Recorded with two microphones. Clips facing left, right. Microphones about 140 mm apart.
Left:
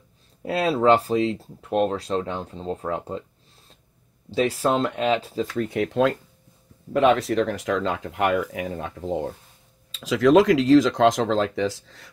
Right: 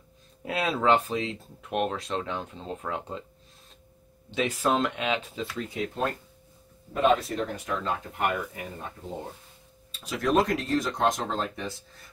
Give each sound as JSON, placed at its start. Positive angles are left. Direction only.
{"t": 0.5, "sound": "speech", "side_deg": 35}
{"t": 4.3, "sound": "speech", "side_deg": 35}
{"t": 5.6, "sound": "speech", "side_deg": 65}